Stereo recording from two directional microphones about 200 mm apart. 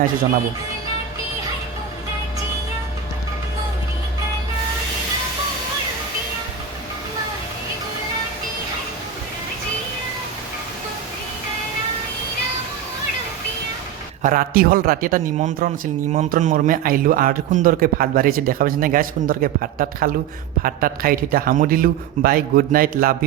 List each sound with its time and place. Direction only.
14.2 s a man's voice: 40° right (ahead or behind)